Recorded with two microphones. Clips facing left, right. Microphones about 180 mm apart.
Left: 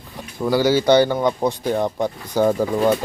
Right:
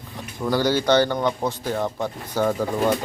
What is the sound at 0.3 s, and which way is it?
Speech, 10° left (ahead or behind).